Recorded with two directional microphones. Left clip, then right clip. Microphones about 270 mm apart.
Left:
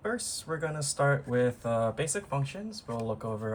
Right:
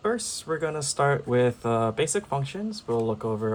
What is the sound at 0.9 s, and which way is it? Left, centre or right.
Speech, right.